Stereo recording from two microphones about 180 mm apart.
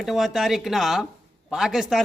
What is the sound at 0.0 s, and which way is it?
A man's voice, centre (ahead or behind).